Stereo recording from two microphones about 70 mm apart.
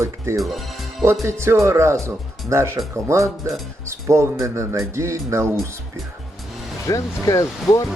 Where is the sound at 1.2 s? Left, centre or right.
Right.